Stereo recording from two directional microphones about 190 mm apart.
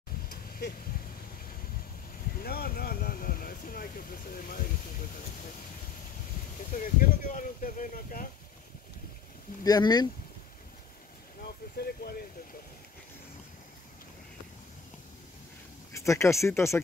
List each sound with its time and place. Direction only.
0.3 s a sound: 50° left (ahead or behind)
2.4 s speech: 50° left (ahead or behind)
6.7 s speech: 45° left (ahead or behind)
9.6 s speech: 20° left (ahead or behind)
11.4 s speech: 55° left (ahead or behind)
15.9 s speech: 15° left (ahead or behind)